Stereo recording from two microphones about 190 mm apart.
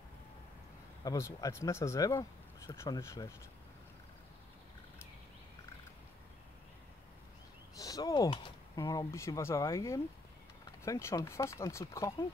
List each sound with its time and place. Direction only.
1.0 s speech: 15° left (ahead or behind)
7.7 s speech: 20° left (ahead or behind)